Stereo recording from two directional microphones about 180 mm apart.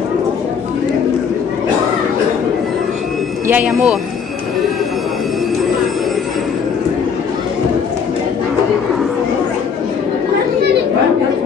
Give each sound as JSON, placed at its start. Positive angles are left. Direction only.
{"t": 3.4, "sound": "speech", "side_deg": -10}